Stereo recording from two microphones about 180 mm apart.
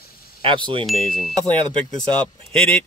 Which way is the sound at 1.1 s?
Centre (ahead or behind).